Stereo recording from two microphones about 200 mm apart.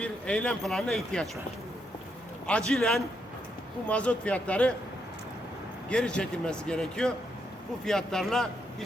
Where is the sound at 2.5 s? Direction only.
5° left (ahead or behind).